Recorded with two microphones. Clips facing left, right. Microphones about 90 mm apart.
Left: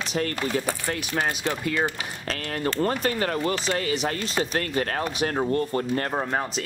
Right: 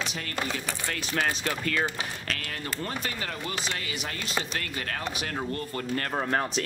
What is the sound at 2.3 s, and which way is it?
Speech, 40° left (ahead or behind).